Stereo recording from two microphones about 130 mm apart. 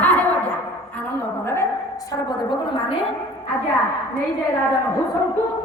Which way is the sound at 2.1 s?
30° left (ahead or behind).